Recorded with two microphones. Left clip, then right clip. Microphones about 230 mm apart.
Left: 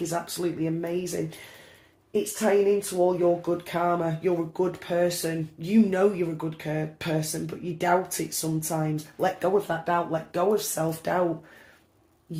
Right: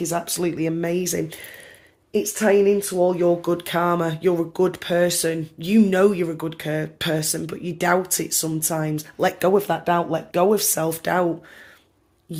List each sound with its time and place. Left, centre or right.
0.0 s speech: right
2.4 s speech: right